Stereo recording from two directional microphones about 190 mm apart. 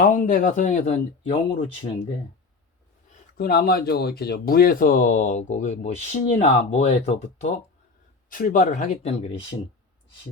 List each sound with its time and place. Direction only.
0.0 s speech: 45° left (ahead or behind)
3.3 s speech: 50° left (ahead or behind)